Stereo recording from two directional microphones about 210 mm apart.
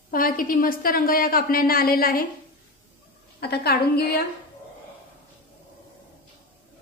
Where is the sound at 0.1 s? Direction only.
40° left (ahead or behind).